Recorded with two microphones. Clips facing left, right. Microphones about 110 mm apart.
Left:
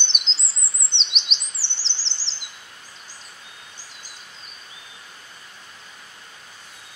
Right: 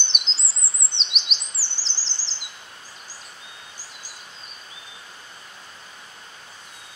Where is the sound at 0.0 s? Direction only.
Centre (ahead or behind).